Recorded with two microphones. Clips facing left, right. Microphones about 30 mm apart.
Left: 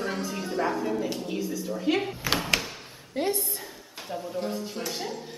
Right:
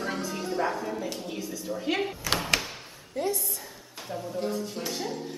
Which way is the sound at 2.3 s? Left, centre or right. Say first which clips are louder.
Left 1 dB; centre.